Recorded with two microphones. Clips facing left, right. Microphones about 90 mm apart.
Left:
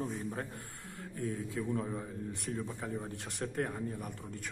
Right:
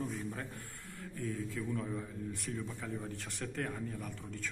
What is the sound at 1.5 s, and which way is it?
A man's voice, 25° left (ahead or behind).